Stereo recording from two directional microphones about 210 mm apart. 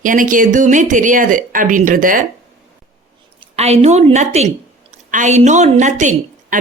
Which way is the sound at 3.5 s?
30° right (ahead or behind).